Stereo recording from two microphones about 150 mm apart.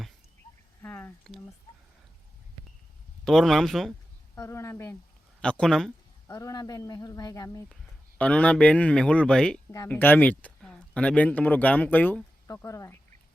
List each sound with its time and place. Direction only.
0.8 s drip: 15° left (ahead or behind)
3.2 s speech: centre (ahead or behind)
4.4 s speech: 20° left (ahead or behind)
5.4 s speech: 5° left (ahead or behind)
6.2 s speech: 20° left (ahead or behind)
8.2 s speech: 10° left (ahead or behind)